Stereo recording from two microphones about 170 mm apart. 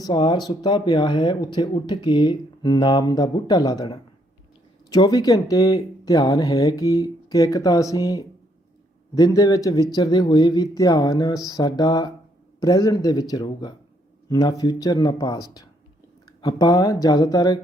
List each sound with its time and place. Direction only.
0.0 s speech: 30° left (ahead or behind)